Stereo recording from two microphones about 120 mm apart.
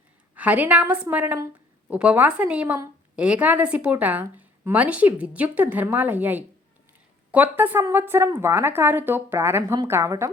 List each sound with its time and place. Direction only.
0.3 s a woman's voice: 15° right (ahead or behind)